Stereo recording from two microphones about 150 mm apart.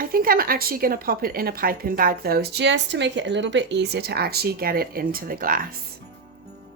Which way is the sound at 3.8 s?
90° right.